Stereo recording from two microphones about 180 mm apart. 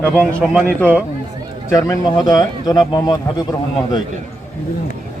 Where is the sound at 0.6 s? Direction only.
10° left (ahead or behind).